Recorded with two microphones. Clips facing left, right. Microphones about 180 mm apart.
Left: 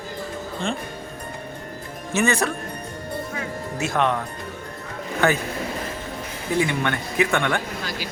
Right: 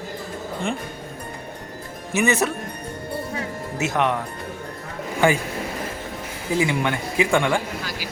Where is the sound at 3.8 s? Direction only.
20° right (ahead or behind).